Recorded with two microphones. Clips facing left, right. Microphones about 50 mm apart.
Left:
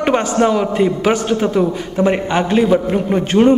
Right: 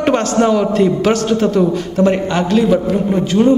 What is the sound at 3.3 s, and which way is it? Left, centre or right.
Speech, left.